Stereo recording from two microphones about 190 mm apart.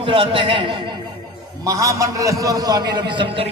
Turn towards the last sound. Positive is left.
turn(degrees=-30)  # may be behind; listen again after turning